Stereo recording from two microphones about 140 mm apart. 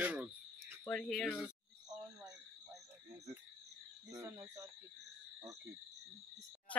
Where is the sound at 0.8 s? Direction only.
5° left (ahead or behind).